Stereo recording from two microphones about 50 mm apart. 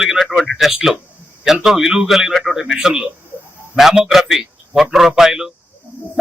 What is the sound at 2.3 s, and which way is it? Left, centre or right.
Speech, centre.